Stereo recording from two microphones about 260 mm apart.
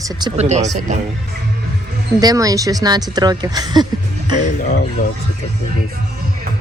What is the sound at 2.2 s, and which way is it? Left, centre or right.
Speech, centre.